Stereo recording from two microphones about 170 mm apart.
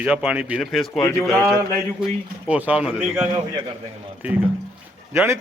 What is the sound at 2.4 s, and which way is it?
Speech, 10° right (ahead or behind).